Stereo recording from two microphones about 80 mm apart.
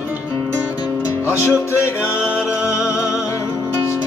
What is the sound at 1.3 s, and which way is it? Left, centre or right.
Music, left.